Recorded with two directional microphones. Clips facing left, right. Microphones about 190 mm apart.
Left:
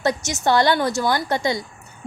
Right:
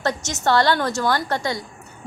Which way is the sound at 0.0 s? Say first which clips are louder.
Left 2 dB; 10° left (ahead or behind).